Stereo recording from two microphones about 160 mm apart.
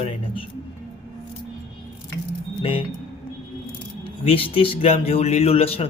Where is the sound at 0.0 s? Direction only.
35° left (ahead or behind).